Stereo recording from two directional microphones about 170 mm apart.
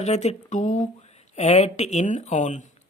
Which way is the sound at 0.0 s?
40° left (ahead or behind).